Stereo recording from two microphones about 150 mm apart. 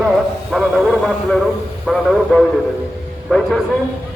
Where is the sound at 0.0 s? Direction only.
Centre (ahead or behind).